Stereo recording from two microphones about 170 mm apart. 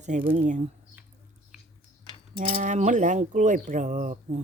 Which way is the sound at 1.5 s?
5° right (ahead or behind).